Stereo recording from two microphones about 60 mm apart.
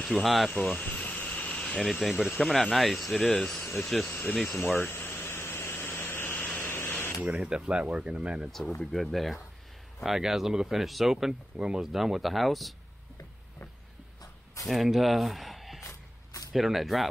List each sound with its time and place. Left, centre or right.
0.0 s speech: centre
0.5 s a sound: left
1.9 s speech: centre
4.1 s speech: left
4.5 s a sound: left
7.2 s speech: centre
8.5 s speech: centre
14.2 s a sound: left
14.7 s speech: centre